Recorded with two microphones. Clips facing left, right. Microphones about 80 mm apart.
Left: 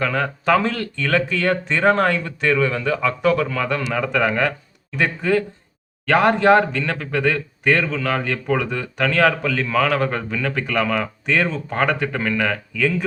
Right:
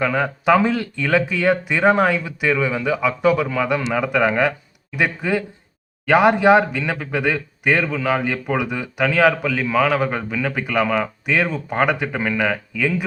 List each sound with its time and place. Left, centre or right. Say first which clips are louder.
0.0 s speech: right 2 dB; centre